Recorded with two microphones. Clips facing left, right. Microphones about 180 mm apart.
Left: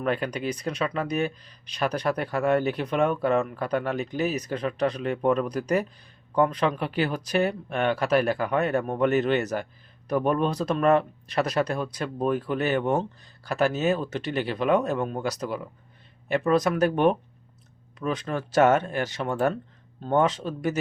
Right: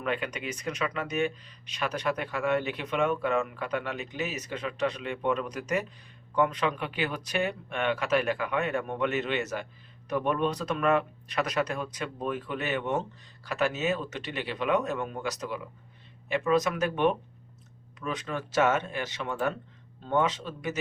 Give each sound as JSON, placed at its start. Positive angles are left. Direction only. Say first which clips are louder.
{"t": 0.0, "sound": "speech", "louder": "left 5 dB", "side_deg": 40}